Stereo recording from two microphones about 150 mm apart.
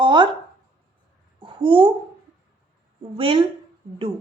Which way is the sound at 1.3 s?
35° right (ahead or behind).